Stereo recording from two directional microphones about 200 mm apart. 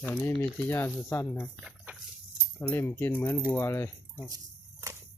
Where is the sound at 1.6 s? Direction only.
5° right (ahead or behind).